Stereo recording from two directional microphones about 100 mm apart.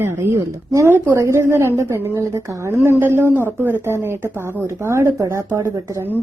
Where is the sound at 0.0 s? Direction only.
30° right (ahead or behind).